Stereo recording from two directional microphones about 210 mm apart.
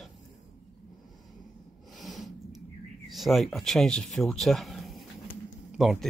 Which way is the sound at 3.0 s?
Centre (ahead or behind).